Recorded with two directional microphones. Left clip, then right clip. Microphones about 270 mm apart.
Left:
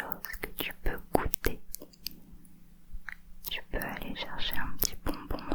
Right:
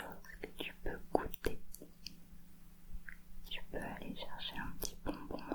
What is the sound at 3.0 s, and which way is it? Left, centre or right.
Whispering, centre.